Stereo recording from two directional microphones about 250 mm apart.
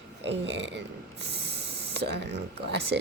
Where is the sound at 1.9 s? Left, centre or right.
Right.